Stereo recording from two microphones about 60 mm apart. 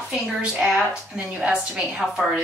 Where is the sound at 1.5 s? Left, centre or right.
Centre.